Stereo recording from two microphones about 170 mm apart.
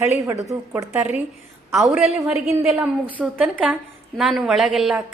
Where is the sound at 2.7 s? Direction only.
5° right (ahead or behind).